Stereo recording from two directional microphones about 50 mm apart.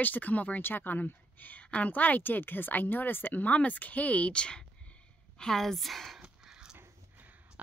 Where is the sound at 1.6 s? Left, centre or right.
Left.